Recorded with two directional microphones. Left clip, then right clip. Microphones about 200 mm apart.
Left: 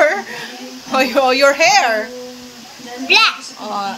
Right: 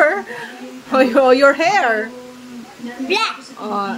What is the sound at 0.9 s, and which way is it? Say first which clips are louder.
Speech: right 2 dB; 35° right (ahead or behind).